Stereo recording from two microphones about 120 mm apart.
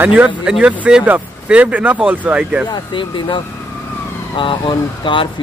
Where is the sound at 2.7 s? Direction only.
40° left (ahead or behind).